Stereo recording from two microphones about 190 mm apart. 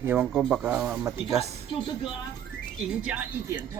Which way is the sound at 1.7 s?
25° left (ahead or behind).